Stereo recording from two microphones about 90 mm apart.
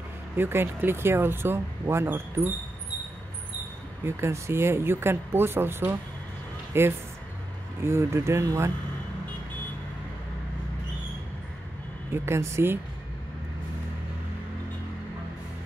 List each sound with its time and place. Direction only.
0.4 s speech: 25° right (ahead or behind)
4.0 s speech: 30° right (ahead or behind)
12.1 s speech: 30° right (ahead or behind)